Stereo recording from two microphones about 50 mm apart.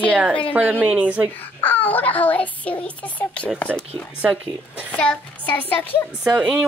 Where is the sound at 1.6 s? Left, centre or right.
Left.